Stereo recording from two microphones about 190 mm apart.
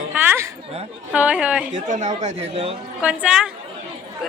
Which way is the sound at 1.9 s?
40° right (ahead or behind).